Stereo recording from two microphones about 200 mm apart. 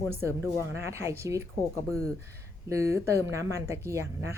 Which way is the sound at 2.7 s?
15° right (ahead or behind).